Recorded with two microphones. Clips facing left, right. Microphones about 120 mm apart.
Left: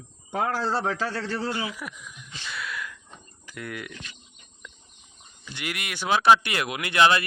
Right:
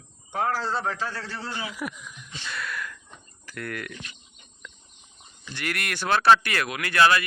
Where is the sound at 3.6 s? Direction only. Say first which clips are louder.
Right 2 dB; 5° left (ahead or behind).